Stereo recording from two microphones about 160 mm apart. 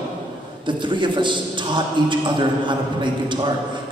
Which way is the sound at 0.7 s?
30° right (ahead or behind).